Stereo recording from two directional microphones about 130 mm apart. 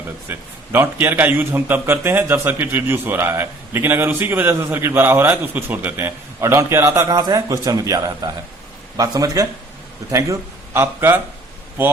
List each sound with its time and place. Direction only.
0.3 s a man's voice: 15° right (ahead or behind)